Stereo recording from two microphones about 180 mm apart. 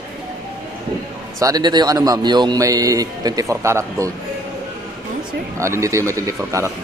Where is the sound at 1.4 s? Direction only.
25° right (ahead or behind).